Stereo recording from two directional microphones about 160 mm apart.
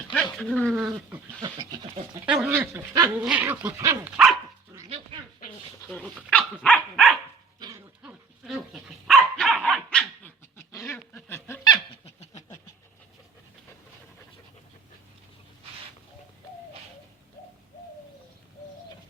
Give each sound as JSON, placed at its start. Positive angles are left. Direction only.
{"t": 0.1, "sound": "speech", "side_deg": 5}
{"t": 0.8, "sound": "dog", "side_deg": -5}
{"t": 1.4, "sound": "speech", "side_deg": -30}
{"t": 2.5, "sound": "dog", "side_deg": -15}
{"t": 5.9, "sound": "dog", "side_deg": 5}
{"t": 7.6, "sound": "dog", "side_deg": -25}
{"t": 8.0, "sound": "dog", "side_deg": 0}
{"t": 10.8, "sound": "squeak", "side_deg": 10}